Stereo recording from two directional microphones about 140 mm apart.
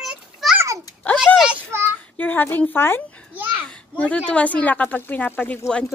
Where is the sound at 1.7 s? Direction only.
20° right (ahead or behind).